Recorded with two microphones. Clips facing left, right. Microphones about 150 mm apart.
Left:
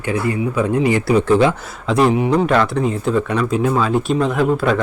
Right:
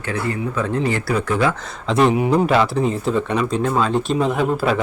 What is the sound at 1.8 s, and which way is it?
Speech, centre (ahead or behind).